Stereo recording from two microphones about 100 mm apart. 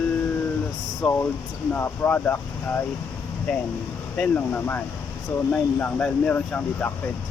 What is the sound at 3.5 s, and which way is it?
Speech, 10° left (ahead or behind).